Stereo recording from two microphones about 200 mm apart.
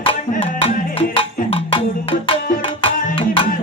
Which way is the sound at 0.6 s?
30° left (ahead or behind).